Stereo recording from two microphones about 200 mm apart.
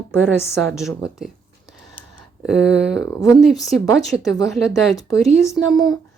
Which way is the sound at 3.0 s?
15° left (ahead or behind).